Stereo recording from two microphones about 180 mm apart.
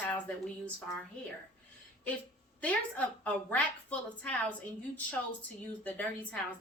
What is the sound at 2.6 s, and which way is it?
A woman's voice, 10° left (ahead or behind).